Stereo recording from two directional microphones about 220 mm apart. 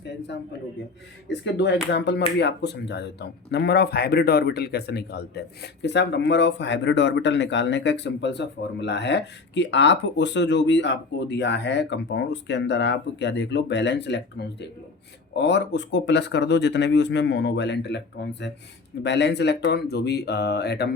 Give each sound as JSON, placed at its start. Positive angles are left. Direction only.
{"t": 1.3, "sound": "speech", "side_deg": 50}